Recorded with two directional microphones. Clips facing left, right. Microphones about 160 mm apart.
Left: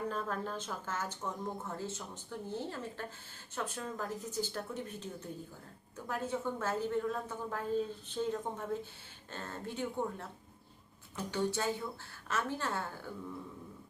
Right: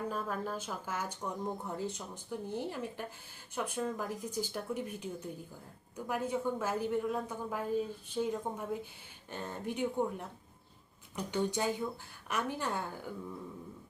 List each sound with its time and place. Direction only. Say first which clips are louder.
0.1 s speech: right 1 dB; 10° right (ahead or behind)
6.1 s speech: right 2 dB; 10° right (ahead or behind)